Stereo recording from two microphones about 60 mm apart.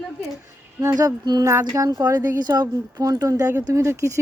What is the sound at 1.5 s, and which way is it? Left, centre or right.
Speech, right.